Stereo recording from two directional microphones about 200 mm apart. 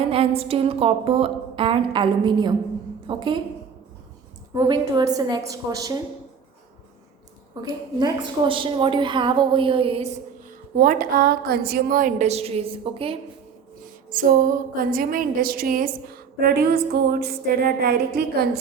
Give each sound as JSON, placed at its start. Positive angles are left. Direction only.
{"t": 0.0, "sound": "a woman's voice", "side_deg": -30}
{"t": 4.5, "sound": "a woman's voice", "side_deg": -20}
{"t": 7.5, "sound": "a woman's voice", "side_deg": -20}
{"t": 10.8, "sound": "a woman's voice", "side_deg": -45}
{"t": 14.1, "sound": "a woman's voice", "side_deg": -45}